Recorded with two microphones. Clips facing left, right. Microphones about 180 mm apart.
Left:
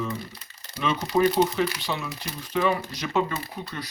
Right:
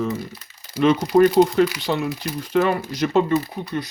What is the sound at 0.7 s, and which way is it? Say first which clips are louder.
Speech: right 8 dB; 75° right (ahead or behind).